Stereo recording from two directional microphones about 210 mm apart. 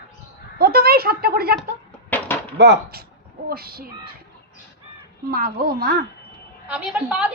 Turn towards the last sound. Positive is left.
turn(degrees=-5)  # may be behind; listen again after turning